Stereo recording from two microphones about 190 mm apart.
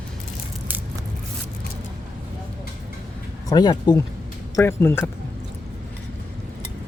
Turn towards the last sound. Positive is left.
turn(degrees=10)  # may be behind; listen again after turning